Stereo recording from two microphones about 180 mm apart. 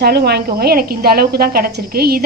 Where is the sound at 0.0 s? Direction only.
60° right (ahead or behind).